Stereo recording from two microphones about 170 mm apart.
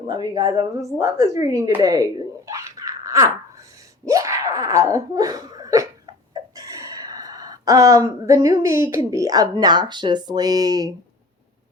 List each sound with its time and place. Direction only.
0.1 s a woman's voice: 20° right (ahead or behind)
2.5 s laughter: 20° right (ahead or behind)